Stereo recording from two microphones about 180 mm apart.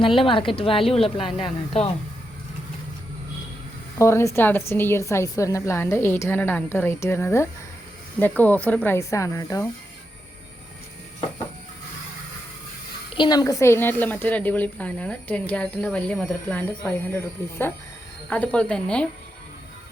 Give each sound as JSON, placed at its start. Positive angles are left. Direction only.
{"t": 0.0, "sound": "speech", "side_deg": 30}
{"t": 3.9, "sound": "speech", "side_deg": 15}
{"t": 13.1, "sound": "speech", "side_deg": 25}
{"t": 18.3, "sound": "speech", "side_deg": 5}